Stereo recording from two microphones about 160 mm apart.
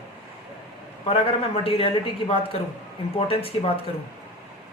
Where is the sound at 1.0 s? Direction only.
35° left (ahead or behind).